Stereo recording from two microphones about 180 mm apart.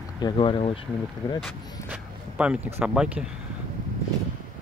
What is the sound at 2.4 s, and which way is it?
Speech, 5° right (ahead or behind).